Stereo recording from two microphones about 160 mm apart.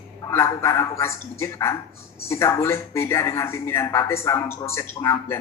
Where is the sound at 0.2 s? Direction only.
15° left (ahead or behind).